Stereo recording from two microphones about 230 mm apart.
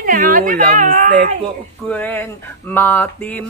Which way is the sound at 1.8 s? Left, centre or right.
Centre.